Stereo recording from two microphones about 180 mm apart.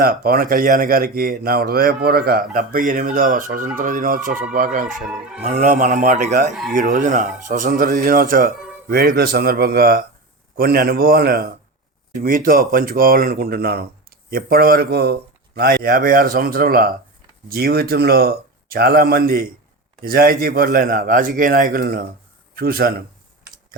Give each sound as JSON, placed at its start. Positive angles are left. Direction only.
{"t": 0.0, "sound": "a man's voice", "side_deg": -55}
{"t": 5.0, "sound": "speech", "side_deg": -5}
{"t": 5.4, "sound": "speech", "side_deg": -40}
{"t": 6.5, "sound": "speech", "side_deg": 0}
{"t": 6.7, "sound": "a man's voice", "side_deg": -45}